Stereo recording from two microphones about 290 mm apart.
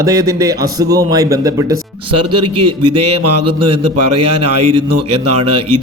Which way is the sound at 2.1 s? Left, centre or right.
Right.